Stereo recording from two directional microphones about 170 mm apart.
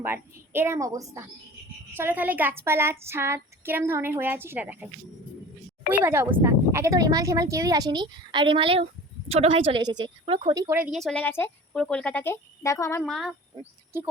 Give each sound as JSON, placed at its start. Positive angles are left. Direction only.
{"t": 0.0, "sound": "speech", "side_deg": -15}
{"t": 5.9, "sound": "a woman's voice", "side_deg": -10}
{"t": 10.8, "sound": "speech", "side_deg": -5}
{"t": 13.0, "sound": "speech", "side_deg": 0}